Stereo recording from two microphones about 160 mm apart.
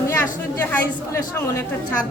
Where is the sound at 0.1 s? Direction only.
10° left (ahead or behind).